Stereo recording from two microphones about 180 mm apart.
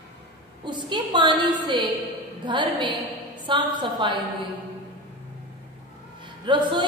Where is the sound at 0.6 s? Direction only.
25° right (ahead or behind).